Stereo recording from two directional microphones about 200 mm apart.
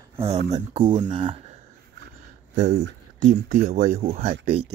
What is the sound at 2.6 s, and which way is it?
Speech, 35° right (ahead or behind).